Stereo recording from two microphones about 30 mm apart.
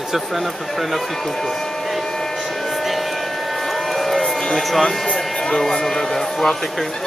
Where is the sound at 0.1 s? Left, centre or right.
Centre.